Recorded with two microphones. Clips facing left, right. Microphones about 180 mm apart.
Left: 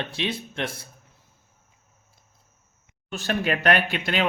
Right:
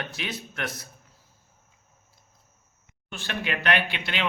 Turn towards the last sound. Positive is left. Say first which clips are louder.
# left 4 dB
turn(degrees=45)  # may be behind; listen again after turning